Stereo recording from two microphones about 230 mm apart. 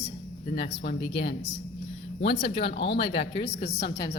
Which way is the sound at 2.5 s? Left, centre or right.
Left.